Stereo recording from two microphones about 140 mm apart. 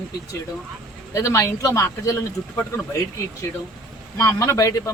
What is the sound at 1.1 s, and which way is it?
A man's voice, 20° left (ahead or behind).